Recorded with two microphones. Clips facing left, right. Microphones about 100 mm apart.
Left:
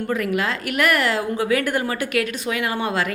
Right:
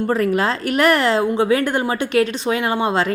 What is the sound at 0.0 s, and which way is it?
Speech, 35° right (ahead or behind).